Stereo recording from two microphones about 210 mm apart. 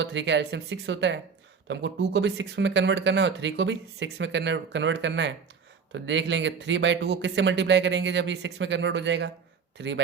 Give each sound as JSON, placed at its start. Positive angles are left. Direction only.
{"t": 0.0, "sound": "speech", "side_deg": -60}